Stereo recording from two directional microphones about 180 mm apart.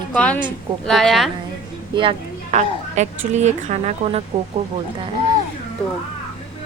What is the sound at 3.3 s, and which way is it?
Speech, 40° right (ahead or behind).